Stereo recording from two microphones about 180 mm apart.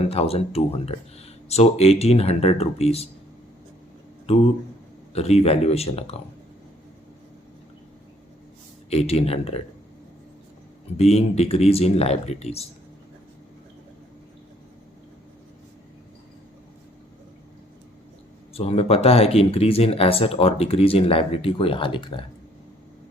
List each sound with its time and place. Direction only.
0.0 s speech: 35° left (ahead or behind)
4.3 s speech: 35° left (ahead or behind)
8.9 s speech: 35° left (ahead or behind)
10.9 s speech: 35° left (ahead or behind)
18.5 s speech: 35° left (ahead or behind)